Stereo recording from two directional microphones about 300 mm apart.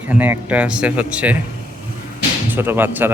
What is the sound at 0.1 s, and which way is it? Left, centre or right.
A man's voice, centre.